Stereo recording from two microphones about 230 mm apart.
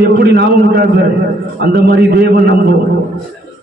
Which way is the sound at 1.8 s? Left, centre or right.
Right.